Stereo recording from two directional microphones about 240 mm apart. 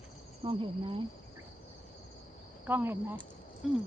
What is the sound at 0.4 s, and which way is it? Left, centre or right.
Speech, right.